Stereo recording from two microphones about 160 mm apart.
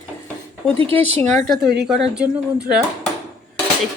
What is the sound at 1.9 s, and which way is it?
Speech, 5° right (ahead or behind).